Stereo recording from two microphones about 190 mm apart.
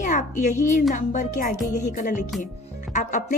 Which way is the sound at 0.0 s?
40° left (ahead or behind).